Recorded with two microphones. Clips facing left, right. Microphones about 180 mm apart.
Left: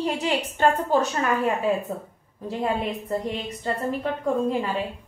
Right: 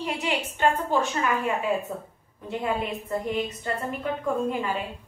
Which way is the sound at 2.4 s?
30° left (ahead or behind).